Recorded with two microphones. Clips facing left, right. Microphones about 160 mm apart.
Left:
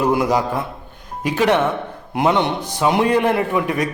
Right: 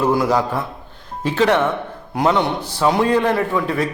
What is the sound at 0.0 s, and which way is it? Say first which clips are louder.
A man's voice: even; 15° left (ahead or behind).